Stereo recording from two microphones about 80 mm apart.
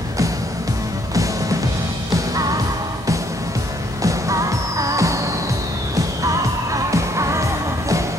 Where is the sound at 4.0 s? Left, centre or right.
Right.